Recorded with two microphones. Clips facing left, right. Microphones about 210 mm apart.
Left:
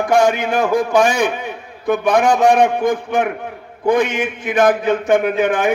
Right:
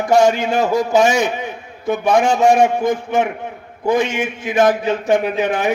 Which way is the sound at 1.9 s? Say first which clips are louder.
Left 1 dB; 60° left (ahead or behind).